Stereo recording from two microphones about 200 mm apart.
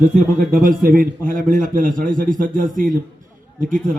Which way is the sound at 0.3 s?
45° right (ahead or behind).